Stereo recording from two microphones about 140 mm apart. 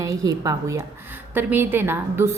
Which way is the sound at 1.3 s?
15° right (ahead or behind).